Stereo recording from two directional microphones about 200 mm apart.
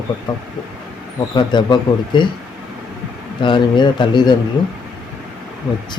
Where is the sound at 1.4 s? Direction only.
25° left (ahead or behind).